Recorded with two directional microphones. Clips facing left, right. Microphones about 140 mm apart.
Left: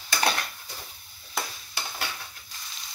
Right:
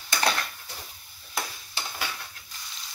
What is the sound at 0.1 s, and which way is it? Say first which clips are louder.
Stir: even; 5° left (ahead or behind).